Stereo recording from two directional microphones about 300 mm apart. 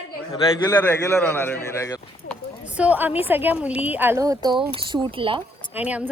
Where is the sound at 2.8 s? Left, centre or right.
Centre.